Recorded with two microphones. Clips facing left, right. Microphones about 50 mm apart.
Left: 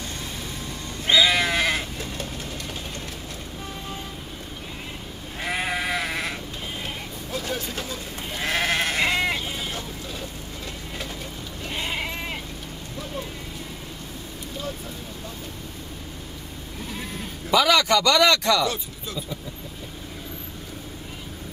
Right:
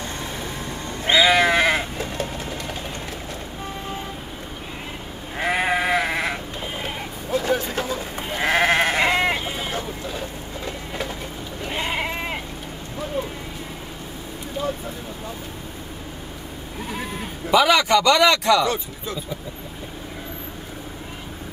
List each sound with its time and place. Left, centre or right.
0.0 s sheep: right
5.4 s sheep: right
9.5 s goat: right
11.6 s sheep: right
16.9 s bleat: right